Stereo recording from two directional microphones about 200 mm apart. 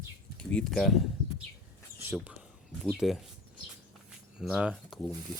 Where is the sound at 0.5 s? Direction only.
Centre (ahead or behind).